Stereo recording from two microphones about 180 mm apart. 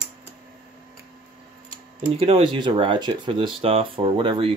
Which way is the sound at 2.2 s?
30° right (ahead or behind).